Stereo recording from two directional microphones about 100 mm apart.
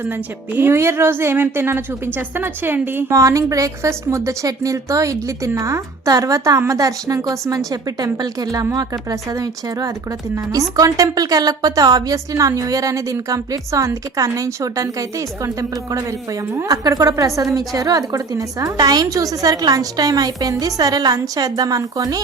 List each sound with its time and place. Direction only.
0.0 s a woman's voice: 20° right (ahead or behind); by 22.2 s 35° right (ahead or behind)